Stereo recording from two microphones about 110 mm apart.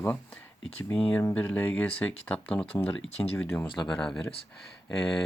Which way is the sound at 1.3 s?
15° left (ahead or behind).